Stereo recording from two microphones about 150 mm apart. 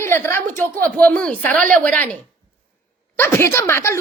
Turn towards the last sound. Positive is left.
turn(degrees=15)  # may be behind; listen again after turning